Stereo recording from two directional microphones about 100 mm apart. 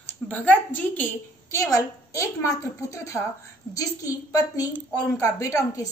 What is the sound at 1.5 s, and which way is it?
A woman's voice, 30° left (ahead or behind).